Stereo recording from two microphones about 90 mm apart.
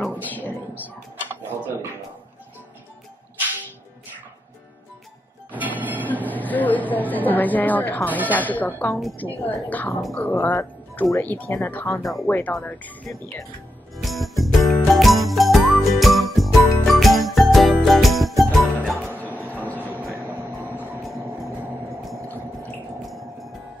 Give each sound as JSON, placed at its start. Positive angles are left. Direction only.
{"t": 0.2, "sound": "a sound", "side_deg": 20}
{"t": 0.8, "sound": "tick-tock", "side_deg": -25}
{"t": 5.5, "sound": "music", "side_deg": -20}
{"t": 6.0, "sound": "a woman's voice", "side_deg": 20}
{"t": 12.0, "sound": "speech", "side_deg": 0}
{"t": 12.3, "sound": "speech", "side_deg": 20}
{"t": 14.0, "sound": "jingle bell", "side_deg": 0}
{"t": 16.8, "sound": "jingle", "side_deg": 0}
{"t": 17.8, "sound": "music", "side_deg": 0}
{"t": 19.3, "sound": "train", "side_deg": -20}
{"t": 20.7, "sound": "vehicle", "side_deg": -20}
{"t": 21.0, "sound": "vehicle", "side_deg": 0}
{"t": 23.0, "sound": "music", "side_deg": 0}